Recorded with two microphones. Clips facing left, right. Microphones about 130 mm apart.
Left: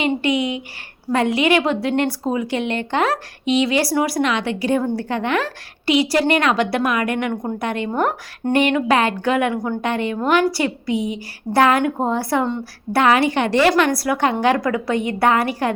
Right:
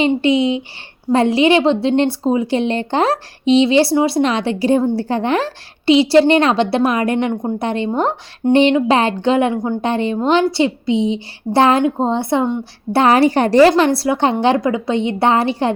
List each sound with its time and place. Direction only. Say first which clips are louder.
0.0 s speech: right 5 dB; 30° right (ahead or behind)
13.0 s a woman's voice: right 4 dB; 35° right (ahead or behind)